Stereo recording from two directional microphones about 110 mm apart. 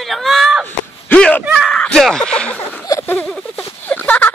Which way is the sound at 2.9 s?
25° left (ahead or behind).